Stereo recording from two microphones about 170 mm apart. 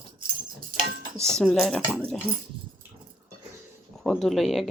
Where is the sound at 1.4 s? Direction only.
Centre (ahead or behind).